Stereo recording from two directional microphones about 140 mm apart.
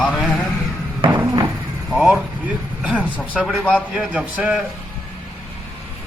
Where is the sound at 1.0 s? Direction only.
35° right (ahead or behind).